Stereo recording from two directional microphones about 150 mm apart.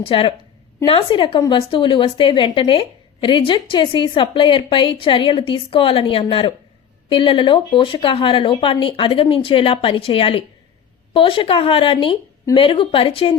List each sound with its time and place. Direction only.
0.0 s a woman's voice: 35° left (ahead or behind)